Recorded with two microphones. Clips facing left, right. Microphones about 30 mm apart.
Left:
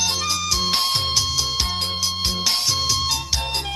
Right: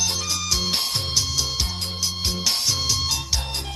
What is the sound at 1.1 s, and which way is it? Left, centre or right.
Music, centre.